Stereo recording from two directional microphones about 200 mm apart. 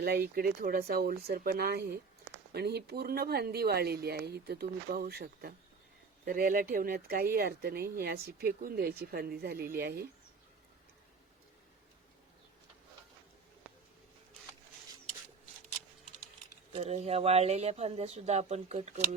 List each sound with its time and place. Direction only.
0.0 s speech: 50° right (ahead or behind)
16.7 s speech: 30° right (ahead or behind)